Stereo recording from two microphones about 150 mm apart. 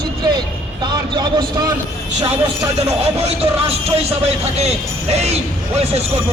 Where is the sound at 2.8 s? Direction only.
40° right (ahead or behind).